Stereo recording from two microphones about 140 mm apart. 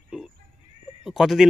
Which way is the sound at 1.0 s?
5° right (ahead or behind).